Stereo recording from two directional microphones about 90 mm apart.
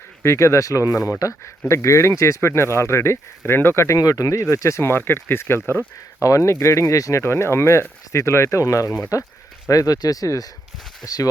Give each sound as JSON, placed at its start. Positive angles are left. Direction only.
{"t": 0.2, "sound": "speech", "side_deg": 35}